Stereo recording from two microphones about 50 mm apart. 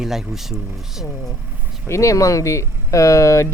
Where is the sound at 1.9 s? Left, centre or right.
Left.